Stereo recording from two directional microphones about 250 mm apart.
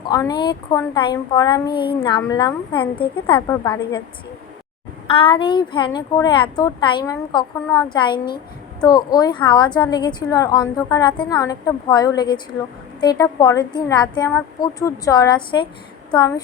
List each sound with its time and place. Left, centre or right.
0.1 s a woman's voice: centre
5.0 s a woman's voice: left